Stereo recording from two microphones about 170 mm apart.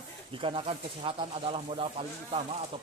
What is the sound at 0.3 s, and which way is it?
Speech, 30° right (ahead or behind).